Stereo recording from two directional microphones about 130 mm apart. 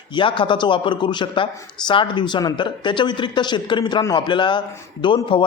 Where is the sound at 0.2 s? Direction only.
40° left (ahead or behind).